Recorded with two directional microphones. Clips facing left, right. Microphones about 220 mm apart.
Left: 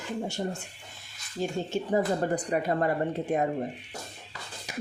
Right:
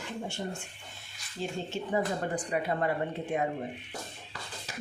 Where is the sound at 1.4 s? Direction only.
45° left (ahead or behind).